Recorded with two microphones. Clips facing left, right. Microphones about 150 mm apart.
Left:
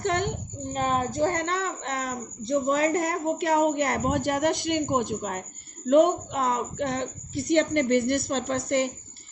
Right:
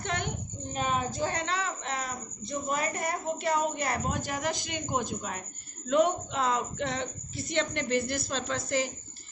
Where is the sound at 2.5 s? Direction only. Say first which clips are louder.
Left 9 dB; 25° left (ahead or behind).